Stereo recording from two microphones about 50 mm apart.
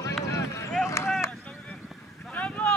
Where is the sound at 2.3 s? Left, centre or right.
Left.